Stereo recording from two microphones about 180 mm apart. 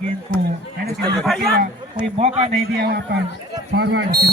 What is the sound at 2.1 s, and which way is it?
Speech, 35° right (ahead or behind).